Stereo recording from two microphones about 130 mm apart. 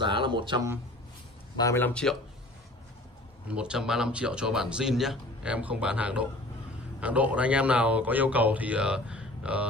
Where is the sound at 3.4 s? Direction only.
5° right (ahead or behind).